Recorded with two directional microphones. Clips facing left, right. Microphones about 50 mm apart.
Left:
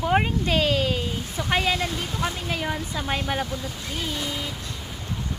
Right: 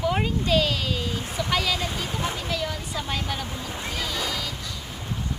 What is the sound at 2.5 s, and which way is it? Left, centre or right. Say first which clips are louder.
Speech: left 1 dB; left.